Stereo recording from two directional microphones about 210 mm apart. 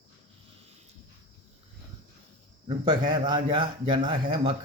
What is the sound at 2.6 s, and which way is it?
A man's voice, 20° right (ahead or behind).